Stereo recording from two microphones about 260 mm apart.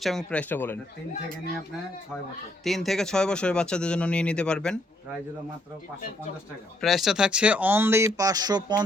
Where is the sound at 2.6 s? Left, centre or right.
Centre.